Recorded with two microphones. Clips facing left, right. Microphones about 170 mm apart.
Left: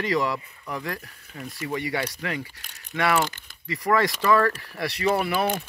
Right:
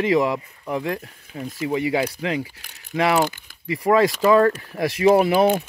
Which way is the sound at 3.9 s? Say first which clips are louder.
Right 5 dB; 35° right (ahead or behind).